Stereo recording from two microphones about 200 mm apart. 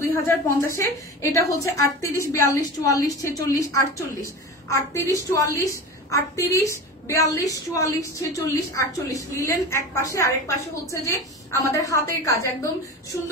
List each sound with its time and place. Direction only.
0.1 s a woman's voice: 15° left (ahead or behind)